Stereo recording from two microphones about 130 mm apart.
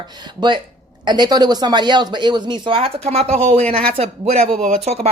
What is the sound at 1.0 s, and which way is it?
Speech, 35° right (ahead or behind).